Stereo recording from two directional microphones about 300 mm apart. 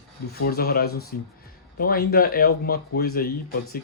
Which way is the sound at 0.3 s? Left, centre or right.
Left.